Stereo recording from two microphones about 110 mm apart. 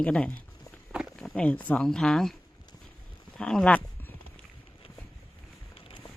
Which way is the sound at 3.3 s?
5° left (ahead or behind).